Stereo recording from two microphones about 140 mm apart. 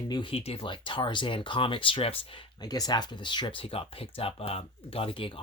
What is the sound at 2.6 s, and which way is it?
Speech, 30° left (ahead or behind).